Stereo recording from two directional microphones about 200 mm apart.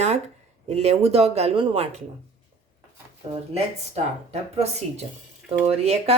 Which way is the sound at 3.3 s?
30° right (ahead or behind).